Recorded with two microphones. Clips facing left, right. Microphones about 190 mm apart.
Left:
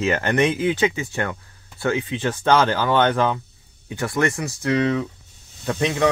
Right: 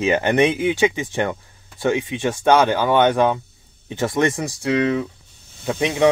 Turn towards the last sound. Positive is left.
turn(degrees=-15)  # may be behind; listen again after turning